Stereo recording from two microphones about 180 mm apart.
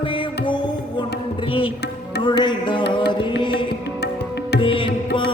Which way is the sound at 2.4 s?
25° left (ahead or behind).